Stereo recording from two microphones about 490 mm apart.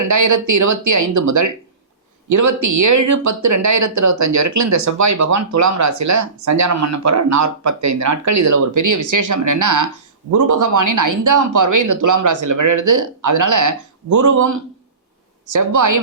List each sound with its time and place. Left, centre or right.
0.0 s speech: right